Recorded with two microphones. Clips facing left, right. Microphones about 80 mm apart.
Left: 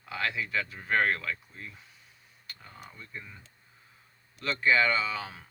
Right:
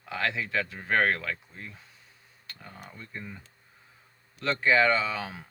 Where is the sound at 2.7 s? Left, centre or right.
Right.